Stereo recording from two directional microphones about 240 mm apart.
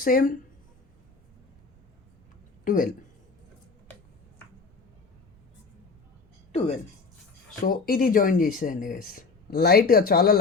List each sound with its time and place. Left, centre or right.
0.0 s speech: left
2.6 s speech: left
6.5 s speech: left